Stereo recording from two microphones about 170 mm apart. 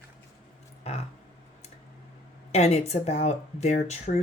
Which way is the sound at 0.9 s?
35° left (ahead or behind).